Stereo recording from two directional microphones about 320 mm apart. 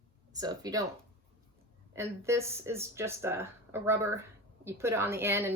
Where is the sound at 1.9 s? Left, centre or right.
Centre.